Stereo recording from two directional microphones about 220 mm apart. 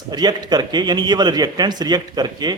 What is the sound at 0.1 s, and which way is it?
A man's voice, 20° right (ahead or behind).